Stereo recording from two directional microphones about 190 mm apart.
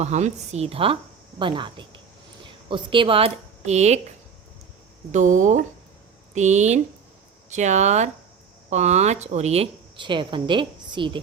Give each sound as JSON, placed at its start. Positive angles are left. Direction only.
{"t": 0.0, "sound": "a woman's voice", "side_deg": -35}
{"t": 5.1, "sound": "a woman's voice", "side_deg": -40}